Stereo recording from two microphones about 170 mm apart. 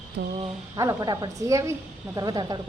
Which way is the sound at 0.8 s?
20° right (ahead or behind).